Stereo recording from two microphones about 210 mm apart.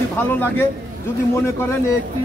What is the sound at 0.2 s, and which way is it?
Speech, 10° left (ahead or behind).